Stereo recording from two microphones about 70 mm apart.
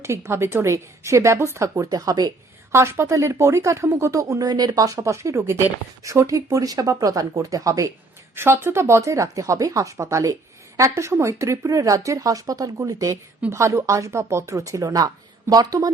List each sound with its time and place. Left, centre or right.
0.0 s speech: right
2.7 s speech: right
4.4 s speech: right
8.4 s speech: right
13.5 s speech: right